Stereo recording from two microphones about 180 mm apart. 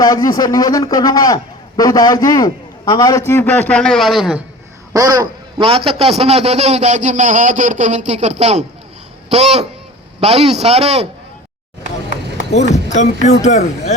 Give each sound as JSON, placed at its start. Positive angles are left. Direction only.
{"t": 0.0, "sound": "a man's voice", "side_deg": 20}
{"t": 4.9, "sound": "a man's voice", "side_deg": -20}
{"t": 12.5, "sound": "music", "side_deg": 40}